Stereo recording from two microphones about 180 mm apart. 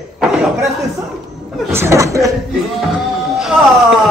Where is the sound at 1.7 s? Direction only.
15° right (ahead or behind).